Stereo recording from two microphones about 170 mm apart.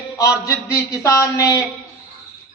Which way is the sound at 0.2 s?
20° left (ahead or behind).